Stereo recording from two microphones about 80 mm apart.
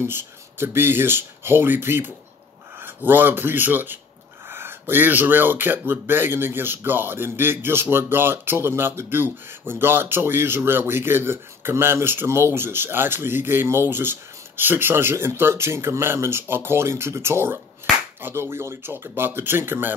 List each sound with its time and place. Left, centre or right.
0.0 s speech: right